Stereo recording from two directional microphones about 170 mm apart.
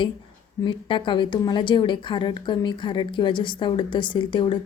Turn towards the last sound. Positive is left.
turn(degrees=30)  # may be behind; listen again after turning